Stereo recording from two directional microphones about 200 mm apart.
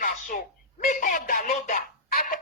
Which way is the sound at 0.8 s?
40° left (ahead or behind).